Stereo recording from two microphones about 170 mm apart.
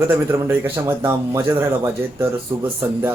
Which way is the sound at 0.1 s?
15° right (ahead or behind).